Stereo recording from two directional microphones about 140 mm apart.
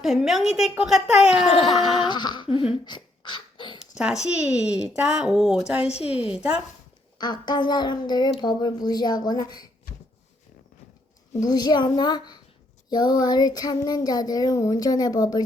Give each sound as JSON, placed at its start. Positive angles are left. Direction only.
{"t": 0.0, "sound": "speech", "side_deg": 0}
{"t": 1.5, "sound": "a sound", "side_deg": 35}
{"t": 3.9, "sound": "speech", "side_deg": -5}
{"t": 5.8, "sound": "a woman's voice", "side_deg": 45}
{"t": 6.3, "sound": "speech", "side_deg": -10}
{"t": 7.2, "sound": "speech", "side_deg": 30}
{"t": 11.3, "sound": "child singing", "side_deg": 30}